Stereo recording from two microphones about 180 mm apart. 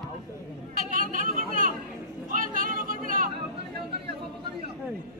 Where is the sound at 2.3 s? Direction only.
50° right (ahead or behind).